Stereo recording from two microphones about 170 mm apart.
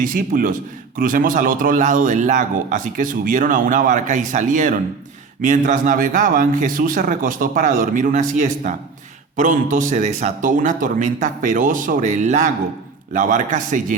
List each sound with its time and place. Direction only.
0.0 s a man's voice: 55° right (ahead or behind)